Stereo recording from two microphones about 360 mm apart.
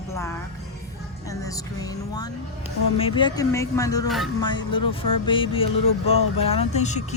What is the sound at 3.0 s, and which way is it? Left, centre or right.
Speech, centre.